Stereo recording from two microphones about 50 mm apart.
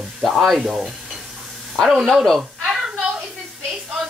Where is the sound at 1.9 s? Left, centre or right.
Centre.